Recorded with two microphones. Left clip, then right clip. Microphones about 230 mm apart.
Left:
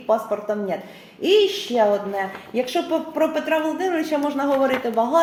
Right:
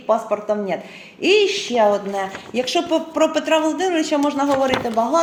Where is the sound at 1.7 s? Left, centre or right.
Right.